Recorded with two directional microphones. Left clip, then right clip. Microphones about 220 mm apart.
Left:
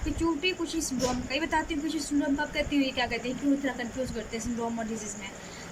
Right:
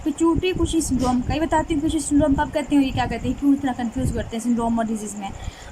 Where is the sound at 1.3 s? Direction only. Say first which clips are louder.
Right 7 dB; 30° right (ahead or behind).